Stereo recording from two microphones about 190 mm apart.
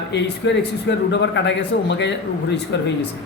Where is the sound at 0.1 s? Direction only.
65° left (ahead or behind).